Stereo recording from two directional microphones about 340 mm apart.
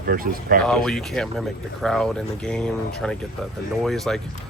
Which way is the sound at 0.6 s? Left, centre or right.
Centre.